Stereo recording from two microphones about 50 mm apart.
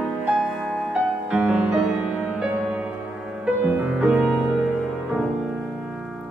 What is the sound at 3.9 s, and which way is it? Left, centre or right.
Music, centre.